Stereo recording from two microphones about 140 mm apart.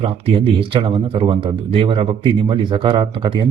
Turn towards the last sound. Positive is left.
turn(degrees=-35)  # may be behind; listen again after turning